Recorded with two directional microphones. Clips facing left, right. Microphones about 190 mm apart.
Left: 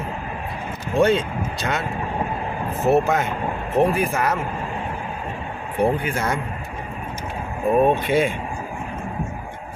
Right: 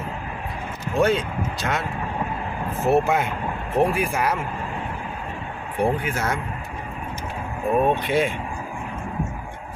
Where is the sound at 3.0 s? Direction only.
10° right (ahead or behind).